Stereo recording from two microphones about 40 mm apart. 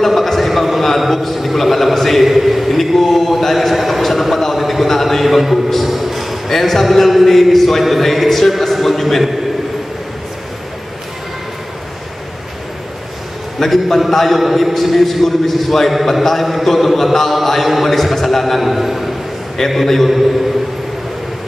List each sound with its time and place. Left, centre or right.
0.0 s a sound: centre
6.5 s a man's voice: centre
13.6 s a man's voice: centre